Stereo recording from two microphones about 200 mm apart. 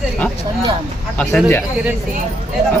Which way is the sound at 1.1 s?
10° left (ahead or behind).